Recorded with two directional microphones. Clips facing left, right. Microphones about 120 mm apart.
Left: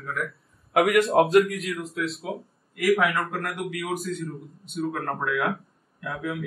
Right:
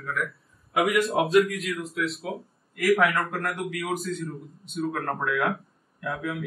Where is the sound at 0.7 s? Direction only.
65° left (ahead or behind).